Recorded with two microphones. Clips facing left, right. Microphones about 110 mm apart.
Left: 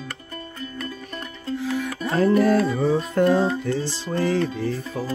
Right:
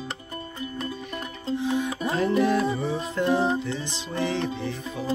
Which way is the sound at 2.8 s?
55° left (ahead or behind).